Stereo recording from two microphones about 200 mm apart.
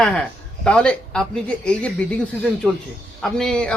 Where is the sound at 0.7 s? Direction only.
5° left (ahead or behind).